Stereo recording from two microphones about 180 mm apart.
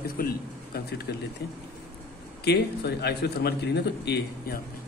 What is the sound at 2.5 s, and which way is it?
A man's voice, 65° left (ahead or behind).